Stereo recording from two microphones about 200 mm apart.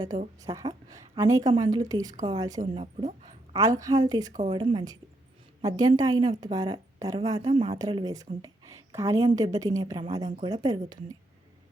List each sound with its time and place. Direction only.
0.4 s a woman's voice: 20° right (ahead or behind)
2.8 s speech: 35° right (ahead or behind)
3.5 s a woman's voice: 15° right (ahead or behind)
4.3 s speech: 35° right (ahead or behind)
4.5 s a woman's voice: 25° right (ahead or behind)
10.2 s speech: 35° right (ahead or behind)
10.5 s a woman's voice: 20° right (ahead or behind)